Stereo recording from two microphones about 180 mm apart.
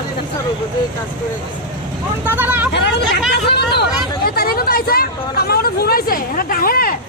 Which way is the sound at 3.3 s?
65° left (ahead or behind).